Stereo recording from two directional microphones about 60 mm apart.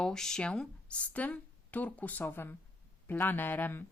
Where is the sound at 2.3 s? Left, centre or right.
Left.